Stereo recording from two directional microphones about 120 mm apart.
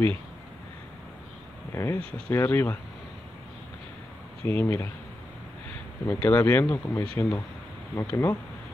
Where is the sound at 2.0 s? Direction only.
50° right (ahead or behind).